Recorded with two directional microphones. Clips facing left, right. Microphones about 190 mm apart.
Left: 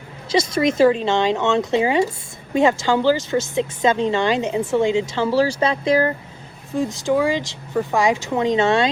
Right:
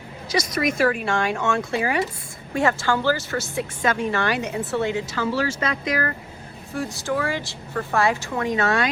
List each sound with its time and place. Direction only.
0.3 s speech: 25° left (ahead or behind)
5.1 s speech: 30° left (ahead or behind)